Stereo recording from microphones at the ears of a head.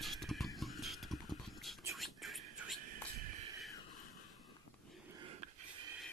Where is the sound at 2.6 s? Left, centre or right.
Right.